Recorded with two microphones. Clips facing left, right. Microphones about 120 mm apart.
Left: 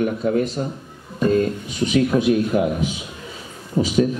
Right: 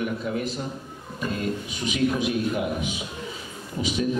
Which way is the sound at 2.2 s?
40° left (ahead or behind).